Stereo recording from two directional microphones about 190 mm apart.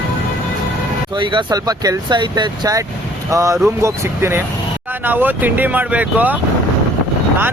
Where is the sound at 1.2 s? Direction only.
25° right (ahead or behind); by 6.3 s 10° right (ahead or behind).